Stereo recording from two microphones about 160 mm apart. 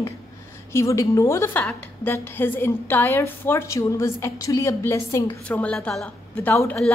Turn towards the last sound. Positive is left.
turn(degrees=10)  # may be behind; listen again after turning